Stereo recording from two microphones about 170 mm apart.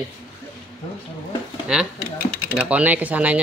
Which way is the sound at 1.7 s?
5° right (ahead or behind).